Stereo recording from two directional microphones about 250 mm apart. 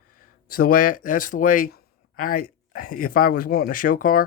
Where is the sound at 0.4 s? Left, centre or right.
Left.